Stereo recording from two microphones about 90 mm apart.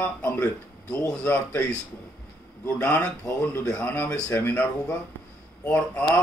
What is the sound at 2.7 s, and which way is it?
Speech, 20° left (ahead or behind).